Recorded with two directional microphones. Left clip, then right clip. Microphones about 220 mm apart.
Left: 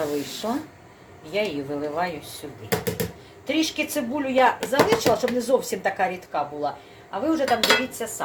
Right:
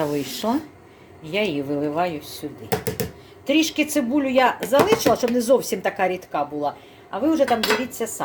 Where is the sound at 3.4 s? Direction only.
55° right (ahead or behind).